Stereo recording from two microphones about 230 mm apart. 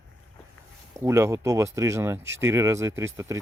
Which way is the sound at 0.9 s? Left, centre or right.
Centre.